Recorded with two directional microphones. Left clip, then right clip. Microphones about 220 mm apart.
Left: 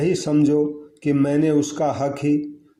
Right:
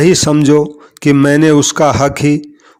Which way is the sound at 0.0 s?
45° right (ahead or behind).